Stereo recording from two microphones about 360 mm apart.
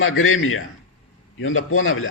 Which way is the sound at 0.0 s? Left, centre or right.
Left.